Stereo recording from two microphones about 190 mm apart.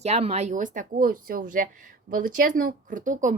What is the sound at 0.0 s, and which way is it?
Speech, 35° right (ahead or behind).